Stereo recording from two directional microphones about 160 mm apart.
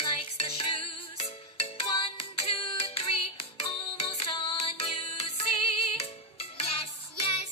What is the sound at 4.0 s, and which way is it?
Music, 35° left (ahead or behind).